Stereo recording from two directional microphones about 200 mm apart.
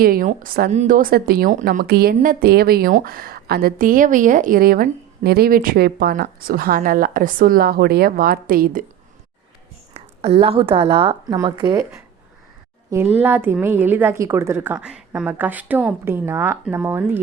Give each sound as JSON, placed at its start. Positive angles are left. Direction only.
{"t": 0.0, "sound": "a woman's voice", "side_deg": -45}
{"t": 9.9, "sound": "a woman's voice", "side_deg": -30}
{"t": 12.9, "sound": "a woman's voice", "side_deg": -10}